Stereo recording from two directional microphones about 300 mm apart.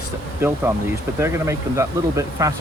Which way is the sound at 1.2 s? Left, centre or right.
Centre.